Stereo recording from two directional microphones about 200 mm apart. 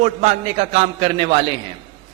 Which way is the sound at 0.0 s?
35° right (ahead or behind).